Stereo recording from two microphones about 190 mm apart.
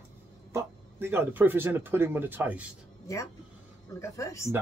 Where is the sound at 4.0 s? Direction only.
15° left (ahead or behind).